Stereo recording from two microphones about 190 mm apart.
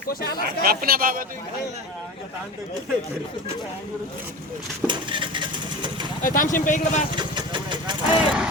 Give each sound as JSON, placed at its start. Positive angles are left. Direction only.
{"t": 0.1, "sound": "speech", "side_deg": 50}
{"t": 0.6, "sound": "speech", "side_deg": -50}
{"t": 4.9, "sound": "a sound", "side_deg": -25}
{"t": 6.2, "sound": "speech", "side_deg": 45}
{"t": 7.2, "sound": "vehicle", "side_deg": -25}
{"t": 8.1, "sound": "a sound", "side_deg": -5}